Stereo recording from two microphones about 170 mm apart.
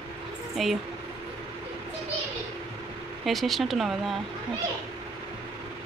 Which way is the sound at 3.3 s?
Centre (ahead or behind).